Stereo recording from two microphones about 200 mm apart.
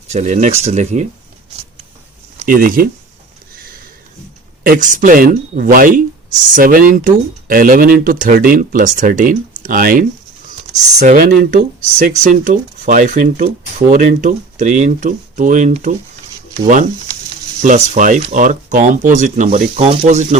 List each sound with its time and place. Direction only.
0.1 s speech: 35° right (ahead or behind)
2.5 s speech: 45° right (ahead or behind)
4.6 s speech: 45° right (ahead or behind)
17.6 s speech: 35° right (ahead or behind)
19.8 s speech: 25° right (ahead or behind)